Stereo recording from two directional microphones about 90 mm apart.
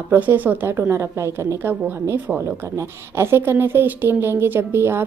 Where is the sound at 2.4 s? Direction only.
30° right (ahead or behind).